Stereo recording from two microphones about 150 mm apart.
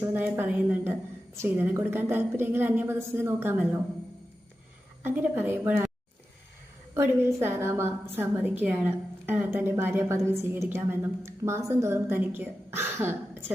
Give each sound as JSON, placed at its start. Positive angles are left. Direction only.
{"t": 0.1, "sound": "a woman's voice", "side_deg": -10}
{"t": 5.0, "sound": "a woman's voice", "side_deg": -10}
{"t": 6.9, "sound": "a woman's voice", "side_deg": -15}